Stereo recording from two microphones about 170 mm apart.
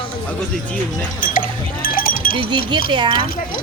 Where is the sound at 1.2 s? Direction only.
55° left (ahead or behind).